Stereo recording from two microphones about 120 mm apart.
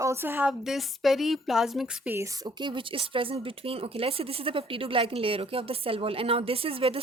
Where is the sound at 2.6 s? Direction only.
45° right (ahead or behind).